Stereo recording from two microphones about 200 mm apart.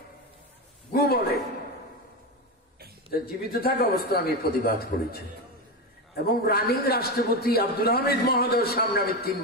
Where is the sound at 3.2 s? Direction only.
50° left (ahead or behind).